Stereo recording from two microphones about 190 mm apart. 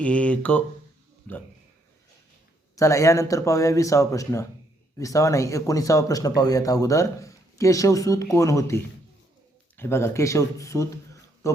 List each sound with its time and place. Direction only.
0.0 s speech: 5° left (ahead or behind)
2.7 s speech: 15° left (ahead or behind)
11.4 s a sound: 15° left (ahead or behind)